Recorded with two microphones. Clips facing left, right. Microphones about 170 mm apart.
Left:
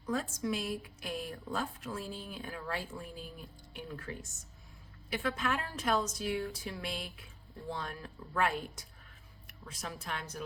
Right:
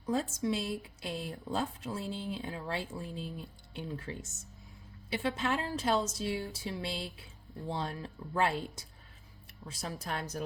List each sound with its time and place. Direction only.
0.0 s a woman's voice: 25° right (ahead or behind)